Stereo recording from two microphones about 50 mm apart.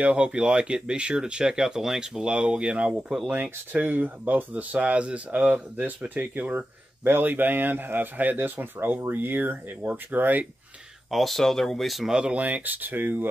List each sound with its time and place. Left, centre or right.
0.0 s speech: right
3.7 s speech: right
11.1 s speech: centre
12.1 s speech: right
12.4 s speech: right